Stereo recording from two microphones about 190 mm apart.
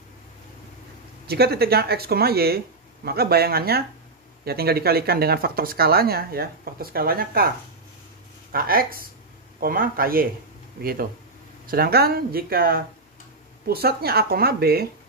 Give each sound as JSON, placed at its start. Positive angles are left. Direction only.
{"t": 1.2, "sound": "speech", "side_deg": -55}